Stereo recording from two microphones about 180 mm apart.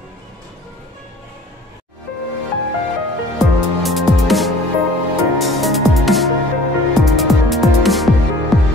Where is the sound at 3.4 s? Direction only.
Centre (ahead or behind).